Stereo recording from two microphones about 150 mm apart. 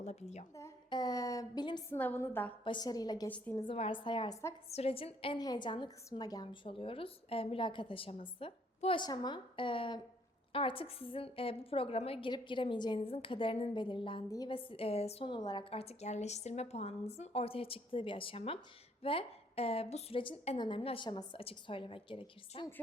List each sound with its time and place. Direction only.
0.0 s a woman's voice: 45° left (ahead or behind)
0.9 s speech: 25° left (ahead or behind)
1.9 s a woman's voice: 15° left (ahead or behind)
2.6 s speech: 25° left (ahead or behind)
3.2 s a woman's voice: 10° left (ahead or behind)
3.8 s a woman's voice: 35° left (ahead or behind)
4.7 s a woman's voice: 45° left (ahead or behind)
5.4 s a woman's voice: 30° left (ahead or behind)
14.3 s speech: 25° left (ahead or behind)
14.5 s a woman's voice: 35° left (ahead or behind)
15.7 s a woman's voice: 40° left (ahead or behind)